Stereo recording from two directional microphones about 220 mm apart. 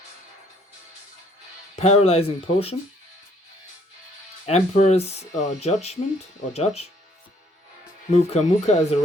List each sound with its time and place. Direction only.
1.8 s speech: 30° left (ahead or behind)
4.4 s speech: 30° left (ahead or behind)
8.1 s speech: 30° left (ahead or behind)